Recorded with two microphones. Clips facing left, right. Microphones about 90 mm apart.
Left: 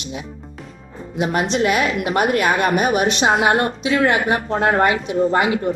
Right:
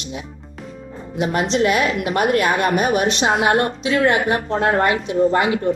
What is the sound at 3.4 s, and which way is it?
A woman's voice, 30° left (ahead or behind).